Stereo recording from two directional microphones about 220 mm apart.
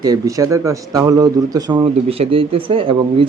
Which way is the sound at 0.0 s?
15° right (ahead or behind).